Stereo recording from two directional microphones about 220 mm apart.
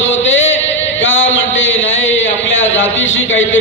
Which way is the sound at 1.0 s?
60° left (ahead or behind).